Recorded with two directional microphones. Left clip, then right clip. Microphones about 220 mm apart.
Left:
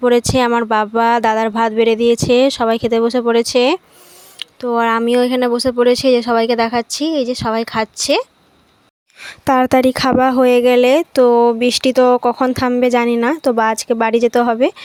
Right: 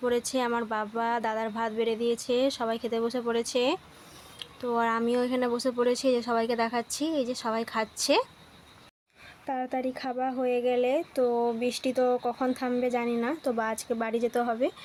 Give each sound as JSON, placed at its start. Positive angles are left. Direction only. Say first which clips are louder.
{"t": 0.0, "sound": "speech", "louder": "left 15 dB", "side_deg": 40}
{"t": 9.2, "sound": "speech", "louder": "left 19 dB", "side_deg": 50}